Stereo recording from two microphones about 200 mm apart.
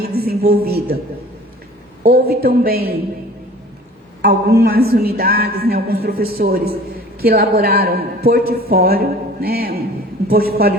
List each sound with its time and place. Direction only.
0.0 s speech: 50° right (ahead or behind)
2.0 s a woman's voice: 50° right (ahead or behind)
4.2 s a woman's voice: 55° right (ahead or behind)